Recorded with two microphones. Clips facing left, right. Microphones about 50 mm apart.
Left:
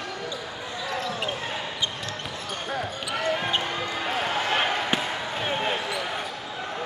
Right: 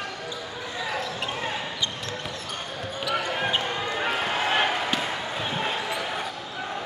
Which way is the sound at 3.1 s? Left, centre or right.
Centre.